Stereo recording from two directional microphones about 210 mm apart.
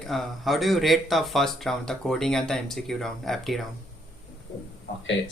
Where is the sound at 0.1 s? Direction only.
Centre (ahead or behind).